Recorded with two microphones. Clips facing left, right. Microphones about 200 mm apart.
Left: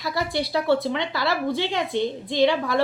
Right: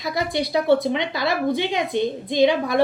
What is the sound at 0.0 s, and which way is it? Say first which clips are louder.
A woman's voice: right 2 dB; 20° right (ahead or behind).